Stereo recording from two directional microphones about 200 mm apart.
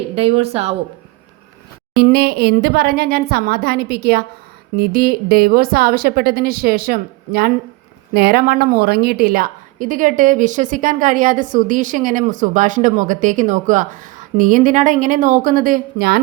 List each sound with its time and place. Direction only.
0.2 s a woman's voice: 30° right (ahead or behind)
2.0 s a woman's voice: 50° right (ahead or behind)